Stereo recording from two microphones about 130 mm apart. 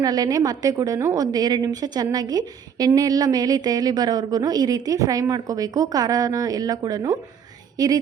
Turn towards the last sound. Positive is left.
turn(degrees=-30)  # may be behind; listen again after turning